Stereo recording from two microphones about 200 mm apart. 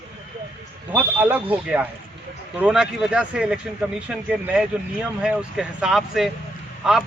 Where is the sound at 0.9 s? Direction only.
10° right (ahead or behind).